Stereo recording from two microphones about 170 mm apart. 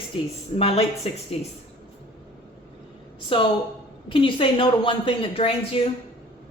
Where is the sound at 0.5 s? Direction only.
35° left (ahead or behind).